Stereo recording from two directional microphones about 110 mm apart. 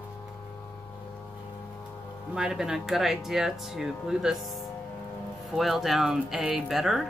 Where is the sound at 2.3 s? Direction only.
5° right (ahead or behind).